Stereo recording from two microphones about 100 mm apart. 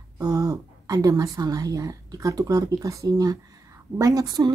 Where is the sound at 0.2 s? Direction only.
40° right (ahead or behind).